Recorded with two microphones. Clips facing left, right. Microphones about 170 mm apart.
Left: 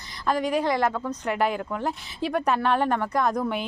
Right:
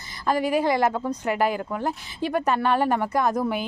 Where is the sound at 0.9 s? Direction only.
15° right (ahead or behind).